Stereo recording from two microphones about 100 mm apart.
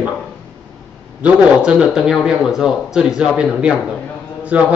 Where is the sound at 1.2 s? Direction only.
10° right (ahead or behind).